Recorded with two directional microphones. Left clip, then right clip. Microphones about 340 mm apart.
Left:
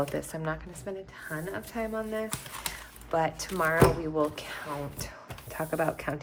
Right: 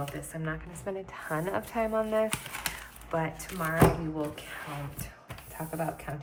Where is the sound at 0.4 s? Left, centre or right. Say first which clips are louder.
Left 1 dB; centre.